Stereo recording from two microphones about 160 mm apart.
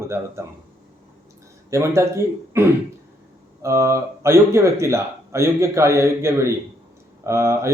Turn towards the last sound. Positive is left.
turn(degrees=-20)  # may be behind; listen again after turning